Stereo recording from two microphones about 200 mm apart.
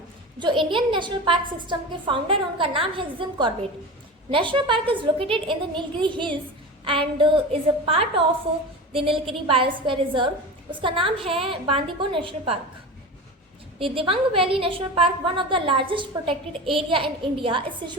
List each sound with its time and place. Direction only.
0.3 s a woman's voice: 25° right (ahead or behind)
13.7 s a woman's voice: 25° right (ahead or behind)